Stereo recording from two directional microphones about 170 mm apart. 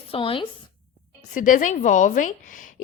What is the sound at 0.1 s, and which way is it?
Speech, 30° left (ahead or behind).